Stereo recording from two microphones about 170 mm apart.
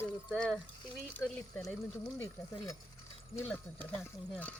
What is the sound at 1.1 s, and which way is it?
Speech, 5° left (ahead or behind).